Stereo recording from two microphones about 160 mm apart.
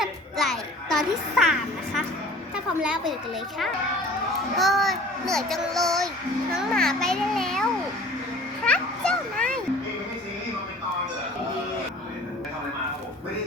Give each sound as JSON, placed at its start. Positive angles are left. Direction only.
{"t": 0.0, "sound": "a child's voice", "side_deg": 0}
{"t": 4.5, "sound": "a child's voice", "side_deg": 0}
{"t": 8.6, "sound": "music", "side_deg": 5}